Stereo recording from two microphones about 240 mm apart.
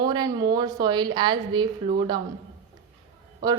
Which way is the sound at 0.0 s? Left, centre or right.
Centre.